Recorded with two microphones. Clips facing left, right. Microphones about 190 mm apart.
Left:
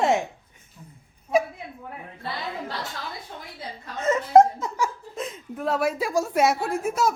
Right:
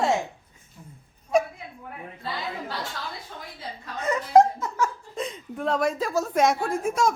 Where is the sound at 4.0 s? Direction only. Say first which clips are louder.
Left 2 dB; 25° left (ahead or behind).